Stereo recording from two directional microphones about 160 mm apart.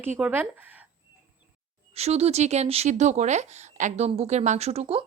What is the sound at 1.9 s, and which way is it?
Speech, 40° right (ahead or behind).